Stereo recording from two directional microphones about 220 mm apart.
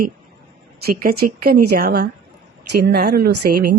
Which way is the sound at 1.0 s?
45° right (ahead or behind).